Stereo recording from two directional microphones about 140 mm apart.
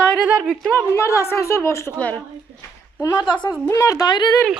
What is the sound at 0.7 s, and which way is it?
A woman's voice, 20° left (ahead or behind).